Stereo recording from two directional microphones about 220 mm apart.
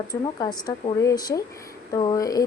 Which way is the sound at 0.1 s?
15° left (ahead or behind).